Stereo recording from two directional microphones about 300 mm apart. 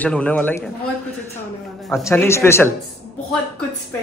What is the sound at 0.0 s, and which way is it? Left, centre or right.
Speech, centre.